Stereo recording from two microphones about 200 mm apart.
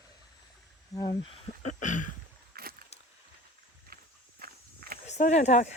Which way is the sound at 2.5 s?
50° right (ahead or behind).